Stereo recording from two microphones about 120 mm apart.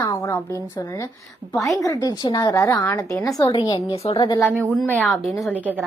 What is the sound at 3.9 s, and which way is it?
Speech, 55° left (ahead or behind).